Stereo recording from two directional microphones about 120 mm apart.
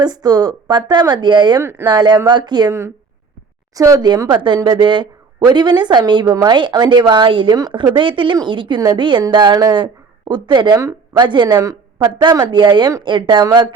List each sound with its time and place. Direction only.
0.0 s a woman's voice: 35° right (ahead or behind)
3.8 s a woman's voice: 30° right (ahead or behind)
11.6 s a woman's voice: 30° right (ahead or behind)